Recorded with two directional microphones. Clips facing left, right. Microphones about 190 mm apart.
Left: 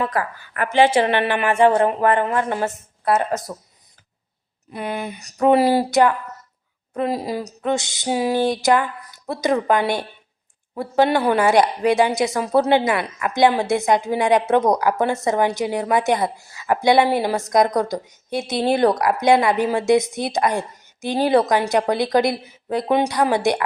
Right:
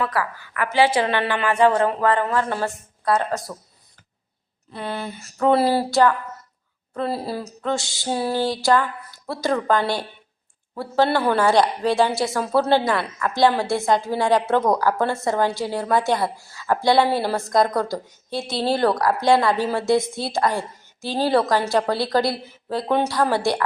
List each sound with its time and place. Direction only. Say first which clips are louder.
0.1 s a woman's voice: left 1 dB; 45° left (ahead or behind)
0.8 s speech: left 3 dB; 20° left (ahead or behind)
4.7 s a sound: left 2 dB; 20° left (ahead or behind)
10.8 s speech: left 2 dB; 20° left (ahead or behind)